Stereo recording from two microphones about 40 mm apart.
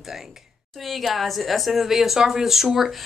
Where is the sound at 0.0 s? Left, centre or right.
Centre.